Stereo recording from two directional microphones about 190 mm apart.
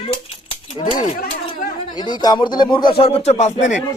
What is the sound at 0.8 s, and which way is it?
A man's voice, 30° left (ahead or behind).